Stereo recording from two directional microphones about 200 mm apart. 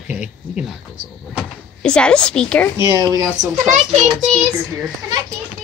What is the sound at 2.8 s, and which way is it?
Speech, 15° right (ahead or behind).